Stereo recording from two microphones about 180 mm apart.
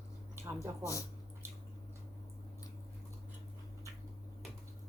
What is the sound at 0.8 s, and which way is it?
Speech, 15° left (ahead or behind).